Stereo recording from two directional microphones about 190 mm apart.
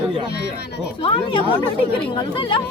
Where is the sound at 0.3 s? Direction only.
60° left (ahead or behind).